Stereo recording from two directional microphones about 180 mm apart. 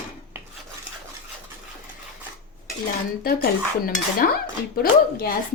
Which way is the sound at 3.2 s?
60° left (ahead or behind).